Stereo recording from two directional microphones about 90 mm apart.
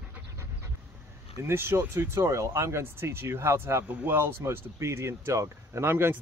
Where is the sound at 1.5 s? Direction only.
25° right (ahead or behind).